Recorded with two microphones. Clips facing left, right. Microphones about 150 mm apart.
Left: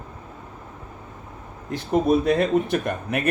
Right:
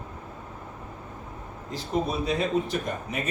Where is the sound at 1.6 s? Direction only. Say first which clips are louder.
Left 8 dB; 60° left (ahead or behind).